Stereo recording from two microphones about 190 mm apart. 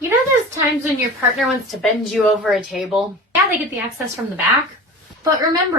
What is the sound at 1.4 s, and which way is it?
Speech, centre (ahead or behind).